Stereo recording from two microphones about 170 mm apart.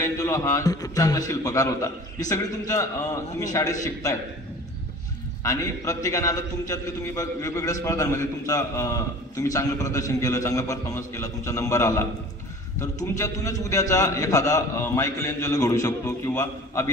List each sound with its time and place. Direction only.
0.0 s a man's voice: 20° left (ahead or behind)
5.4 s a man's voice: 20° left (ahead or behind)
13.2 s a man's voice: 20° left (ahead or behind)